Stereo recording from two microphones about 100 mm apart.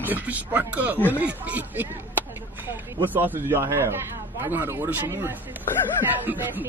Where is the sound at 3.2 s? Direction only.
20° right (ahead or behind).